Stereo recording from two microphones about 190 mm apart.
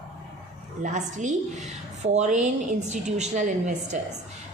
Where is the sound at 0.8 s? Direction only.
40° right (ahead or behind).